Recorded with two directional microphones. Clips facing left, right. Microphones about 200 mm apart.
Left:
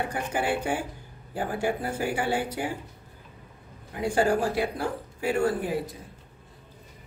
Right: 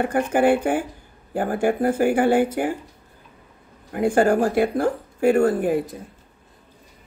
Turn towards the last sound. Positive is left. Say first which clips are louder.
# right 8 dB
turn(degrees=-50)  # may be behind; listen again after turning